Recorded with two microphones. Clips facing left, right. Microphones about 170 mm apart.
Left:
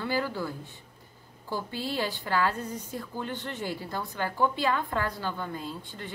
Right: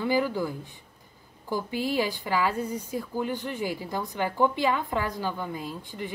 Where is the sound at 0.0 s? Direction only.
15° right (ahead or behind).